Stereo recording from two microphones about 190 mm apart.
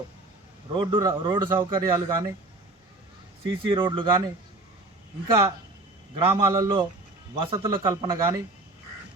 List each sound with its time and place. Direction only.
0.7 s speech: 25° right (ahead or behind)
3.4 s speech: 25° right (ahead or behind)
5.3 s speech: 20° right (ahead or behind)